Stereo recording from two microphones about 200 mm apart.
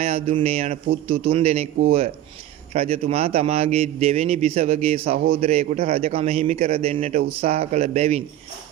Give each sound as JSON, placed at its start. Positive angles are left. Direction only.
{"t": 0.0, "sound": "a man's voice", "side_deg": -30}